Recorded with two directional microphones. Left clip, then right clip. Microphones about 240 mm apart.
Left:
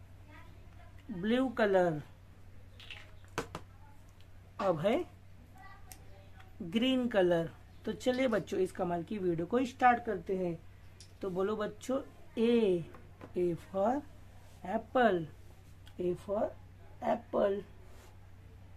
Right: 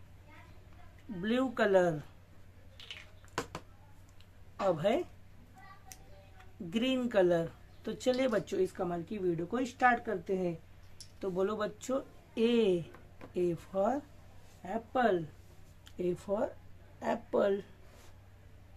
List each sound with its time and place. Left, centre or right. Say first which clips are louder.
1.2 s speech: even; centre
4.6 s speech: right 1 dB; centre
6.7 s speech: even; centre
14.6 s speech: left 2 dB; centre
16.0 s speech: even; centre